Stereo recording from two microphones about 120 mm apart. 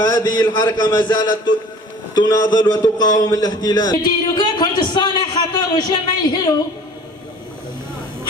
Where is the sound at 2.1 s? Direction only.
35° left (ahead or behind).